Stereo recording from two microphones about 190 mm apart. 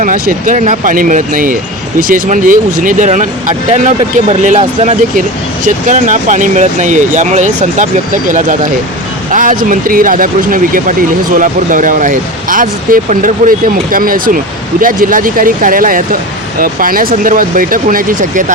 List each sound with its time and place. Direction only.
0.0 s speech: 45° right (ahead or behind)